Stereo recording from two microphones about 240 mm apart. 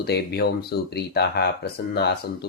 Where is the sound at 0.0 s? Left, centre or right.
Left.